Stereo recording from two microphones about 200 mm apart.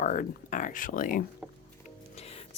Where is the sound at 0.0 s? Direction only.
40° left (ahead or behind).